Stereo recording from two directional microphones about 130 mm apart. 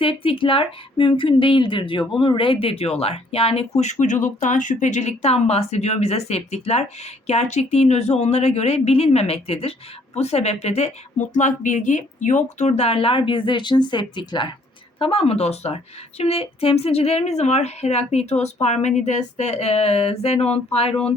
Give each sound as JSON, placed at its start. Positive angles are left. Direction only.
{"t": 0.0, "sound": "speech", "side_deg": 45}
{"t": 11.3, "sound": "speech", "side_deg": 70}
{"t": 14.9, "sound": "speech", "side_deg": 45}